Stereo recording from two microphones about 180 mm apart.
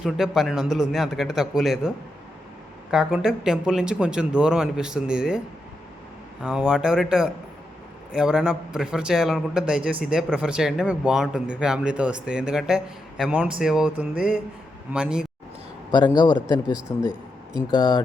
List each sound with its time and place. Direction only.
0.0 s a man's voice: centre (ahead or behind)
2.9 s a man's voice: centre (ahead or behind)
6.4 s a man's voice: 5° right (ahead or behind)
16.1 s speech: 25° left (ahead or behind)